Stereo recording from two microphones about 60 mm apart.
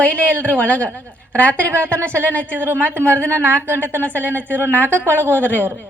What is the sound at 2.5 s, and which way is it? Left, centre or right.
Speech, right.